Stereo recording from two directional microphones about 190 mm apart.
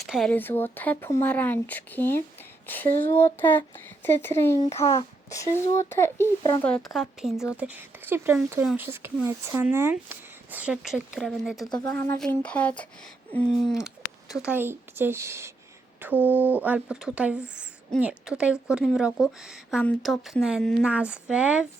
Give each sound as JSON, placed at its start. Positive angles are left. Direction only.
{"t": 0.0, "sound": "speech", "side_deg": 0}
{"t": 0.3, "sound": "a woman's voice", "side_deg": 10}
{"t": 11.6, "sound": "speech", "side_deg": 20}
{"t": 13.7, "sound": "a sound", "side_deg": 15}
{"t": 14.4, "sound": "a woman's voice", "side_deg": -10}